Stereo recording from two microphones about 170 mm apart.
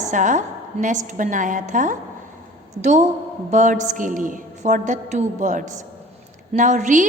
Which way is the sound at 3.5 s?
45° right (ahead or behind).